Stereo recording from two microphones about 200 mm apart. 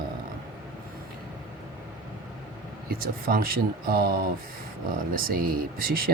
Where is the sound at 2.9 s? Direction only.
45° right (ahead or behind).